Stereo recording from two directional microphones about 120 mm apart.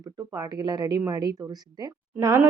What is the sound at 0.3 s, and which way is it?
A woman's voice, 30° right (ahead or behind).